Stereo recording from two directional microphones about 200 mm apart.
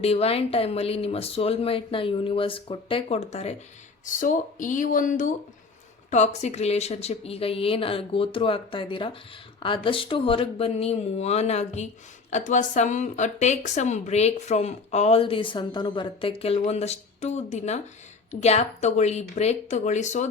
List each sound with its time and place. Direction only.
0.0 s speech: 30° left (ahead or behind)